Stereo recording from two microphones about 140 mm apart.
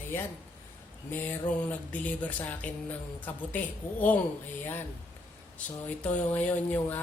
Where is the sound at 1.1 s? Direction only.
15° left (ahead or behind).